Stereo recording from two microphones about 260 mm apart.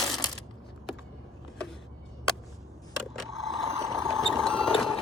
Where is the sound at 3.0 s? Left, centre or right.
Centre.